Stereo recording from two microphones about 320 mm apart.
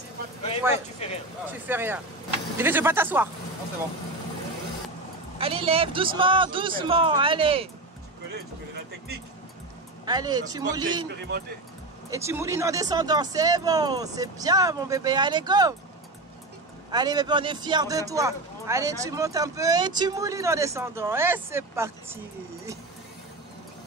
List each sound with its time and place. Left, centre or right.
1.0 s speech: centre
1.5 s a man's voice: centre
5.4 s a man's voice: centre
8.3 s speech: right
10.0 s a man's voice: centre
11.1 s speech: right
12.1 s a man's voice: centre
16.9 s a man's voice: centre